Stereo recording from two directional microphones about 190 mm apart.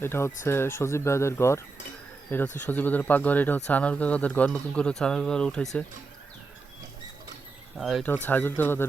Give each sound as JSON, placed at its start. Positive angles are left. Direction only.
{"t": 0.0, "sound": "speech", "side_deg": 10}
{"t": 7.8, "sound": "speech", "side_deg": 0}